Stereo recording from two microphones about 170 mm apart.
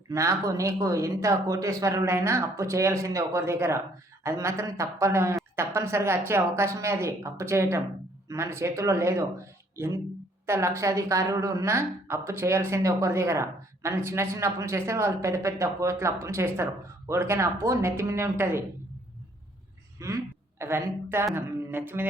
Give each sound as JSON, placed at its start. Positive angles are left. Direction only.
{"t": 0.1, "sound": "speech", "side_deg": -20}
{"t": 20.0, "sound": "speech", "side_deg": -20}